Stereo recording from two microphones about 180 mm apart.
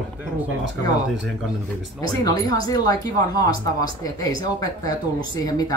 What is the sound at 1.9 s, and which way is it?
Speech, 20° left (ahead or behind).